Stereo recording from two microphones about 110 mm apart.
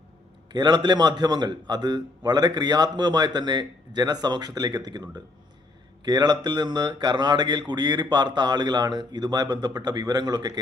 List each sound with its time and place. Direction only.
0.5 s a man's voice: 40° right (ahead or behind)